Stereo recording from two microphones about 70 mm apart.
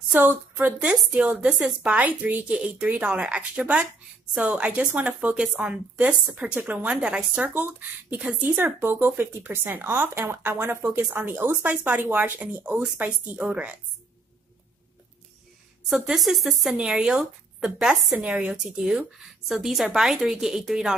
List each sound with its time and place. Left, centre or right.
0.1 s a woman's voice: right
7.5 s speech: right
15.9 s a woman's voice: centre
16.7 s a woman's voice: centre
18.2 s a woman's voice: centre